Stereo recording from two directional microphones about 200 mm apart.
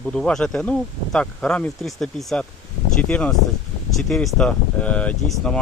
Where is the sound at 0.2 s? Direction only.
5° left (ahead or behind).